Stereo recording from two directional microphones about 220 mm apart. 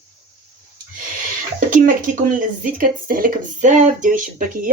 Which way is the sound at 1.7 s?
35° right (ahead or behind).